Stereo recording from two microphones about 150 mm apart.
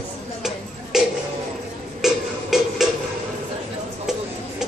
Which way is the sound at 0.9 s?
Centre (ahead or behind).